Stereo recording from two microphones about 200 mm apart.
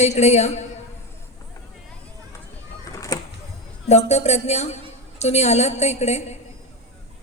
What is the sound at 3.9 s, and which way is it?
A woman's voice, 35° left (ahead or behind).